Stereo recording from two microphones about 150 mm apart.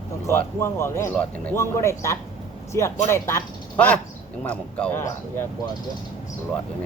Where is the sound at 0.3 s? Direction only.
15° left (ahead or behind).